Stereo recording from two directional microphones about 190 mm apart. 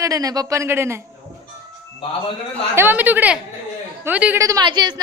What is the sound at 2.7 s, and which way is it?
A woman's voice, 10° right (ahead or behind).